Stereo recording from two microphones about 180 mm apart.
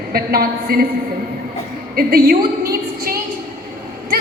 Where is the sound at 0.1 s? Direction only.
60° right (ahead or behind).